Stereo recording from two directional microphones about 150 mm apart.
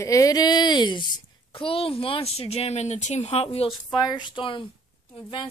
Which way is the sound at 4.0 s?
25° left (ahead or behind).